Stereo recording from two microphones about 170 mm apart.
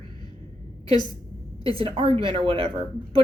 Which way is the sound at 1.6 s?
35° right (ahead or behind).